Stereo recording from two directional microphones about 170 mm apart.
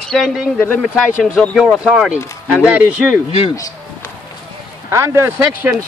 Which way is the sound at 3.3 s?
35° left (ahead or behind).